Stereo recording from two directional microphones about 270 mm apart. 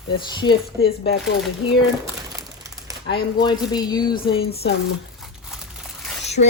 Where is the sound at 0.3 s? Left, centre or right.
Centre.